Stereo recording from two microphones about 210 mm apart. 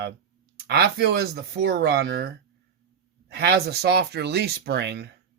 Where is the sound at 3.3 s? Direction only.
50° right (ahead or behind).